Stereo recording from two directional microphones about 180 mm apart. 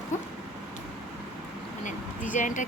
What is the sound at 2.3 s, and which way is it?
Speech, 45° left (ahead or behind).